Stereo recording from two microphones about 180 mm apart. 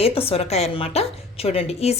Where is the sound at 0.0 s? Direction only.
30° left (ahead or behind).